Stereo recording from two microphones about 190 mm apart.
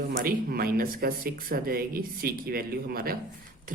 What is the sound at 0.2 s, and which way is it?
Speech, 50° right (ahead or behind).